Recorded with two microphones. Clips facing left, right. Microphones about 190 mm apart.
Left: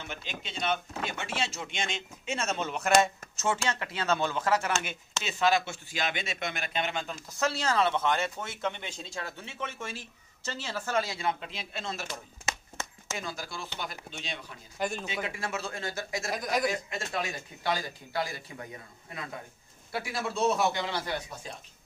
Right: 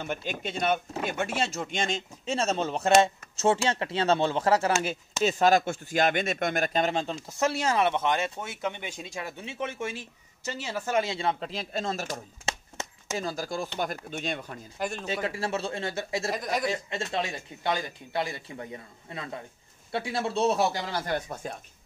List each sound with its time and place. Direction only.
0.0 s speech: 50° right (ahead or behind); by 4.7 s 30° right (ahead or behind)
5.2 s speech: 45° right (ahead or behind)
14.8 s speech: centre (ahead or behind)
15.2 s speech: 35° right (ahead or behind)
16.3 s speech: centre (ahead or behind)
16.6 s speech: 30° right (ahead or behind); by 21.5 s 50° right (ahead or behind)